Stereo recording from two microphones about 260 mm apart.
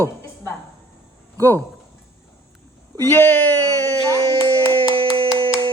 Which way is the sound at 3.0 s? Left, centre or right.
Centre.